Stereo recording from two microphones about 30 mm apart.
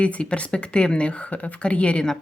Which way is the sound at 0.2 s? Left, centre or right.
Left.